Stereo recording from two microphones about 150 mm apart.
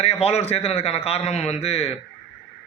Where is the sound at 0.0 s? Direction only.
45° left (ahead or behind).